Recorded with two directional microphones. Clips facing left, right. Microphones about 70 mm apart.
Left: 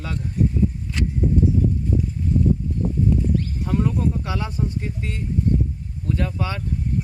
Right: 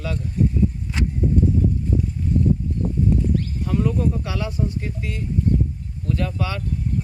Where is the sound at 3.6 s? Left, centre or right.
Left.